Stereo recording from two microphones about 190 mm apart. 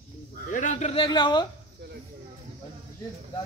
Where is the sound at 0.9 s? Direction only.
25° left (ahead or behind).